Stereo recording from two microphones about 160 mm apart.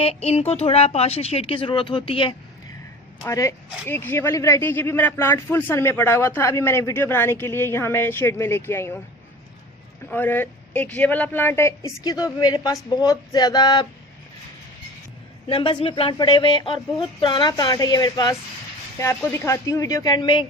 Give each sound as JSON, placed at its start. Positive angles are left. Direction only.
{"t": 0.0, "sound": "speech", "side_deg": 40}
{"t": 3.2, "sound": "speech", "side_deg": 20}
{"t": 10.1, "sound": "speech", "side_deg": 10}
{"t": 15.4, "sound": "speech", "side_deg": 30}